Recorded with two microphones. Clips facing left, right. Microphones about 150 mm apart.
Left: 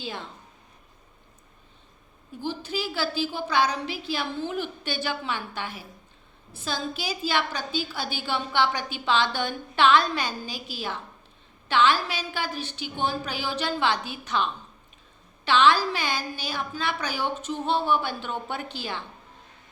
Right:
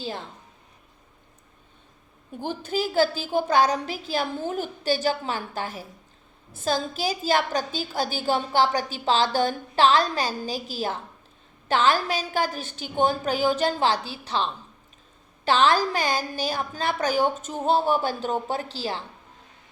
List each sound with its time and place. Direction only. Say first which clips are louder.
0.0 s a woman's voice: right 3 dB; 40° right (ahead or behind)
2.4 s a woman's voice: right 3 dB; 50° right (ahead or behind)